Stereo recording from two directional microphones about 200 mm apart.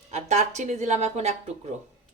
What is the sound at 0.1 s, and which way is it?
Speech, 35° right (ahead or behind).